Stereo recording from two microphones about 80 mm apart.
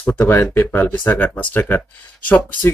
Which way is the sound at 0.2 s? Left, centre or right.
Left.